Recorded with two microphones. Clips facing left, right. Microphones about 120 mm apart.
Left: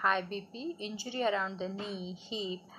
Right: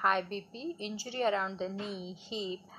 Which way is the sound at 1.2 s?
20° right (ahead or behind).